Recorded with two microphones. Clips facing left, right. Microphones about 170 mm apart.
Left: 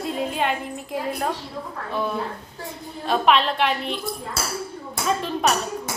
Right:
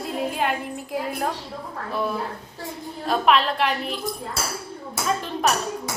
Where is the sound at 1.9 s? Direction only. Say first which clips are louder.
Even; centre (ahead or behind).